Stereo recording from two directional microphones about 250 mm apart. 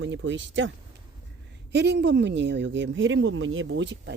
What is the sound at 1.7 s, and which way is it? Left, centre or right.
Speech, right.